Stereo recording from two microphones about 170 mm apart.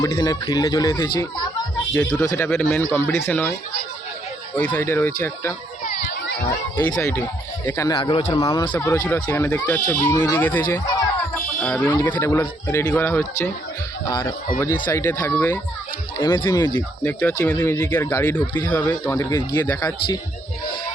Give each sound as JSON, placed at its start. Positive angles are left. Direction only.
{"t": 0.0, "sound": "speech", "side_deg": 20}
{"t": 4.5, "sound": "speech", "side_deg": 5}
{"t": 5.8, "sound": "children playing", "side_deg": 45}
{"t": 6.7, "sound": "speech", "side_deg": 5}
{"t": 7.9, "sound": "speech", "side_deg": 25}
{"t": 8.8, "sound": "speech", "side_deg": 15}
{"t": 14.8, "sound": "speech", "side_deg": 10}
{"t": 17.0, "sound": "speech", "side_deg": 5}
{"t": 17.7, "sound": "speech", "side_deg": 20}